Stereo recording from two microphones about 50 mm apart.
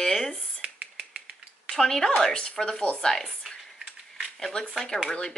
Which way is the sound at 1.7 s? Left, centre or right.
Centre.